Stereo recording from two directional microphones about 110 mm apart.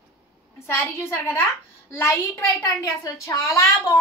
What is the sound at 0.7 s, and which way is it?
A child's voice, 20° left (ahead or behind).